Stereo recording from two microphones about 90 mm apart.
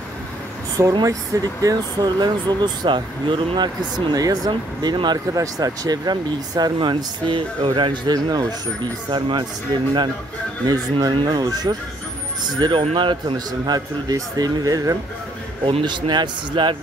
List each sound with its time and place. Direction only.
1.0 s speech: 40° right (ahead or behind); by 8.0 s 65° right (ahead or behind)
8.1 s speech: 45° right (ahead or behind)
9.1 s speech: 60° right (ahead or behind)
10.7 s speech: 50° right (ahead or behind)
12.5 s speech: 60° right (ahead or behind)
13.5 s speech: 50° right (ahead or behind)
15.6 s speech: 60° right (ahead or behind)